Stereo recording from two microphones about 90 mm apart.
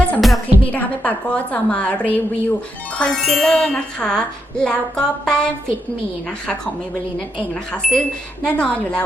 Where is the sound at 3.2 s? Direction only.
Centre (ahead or behind).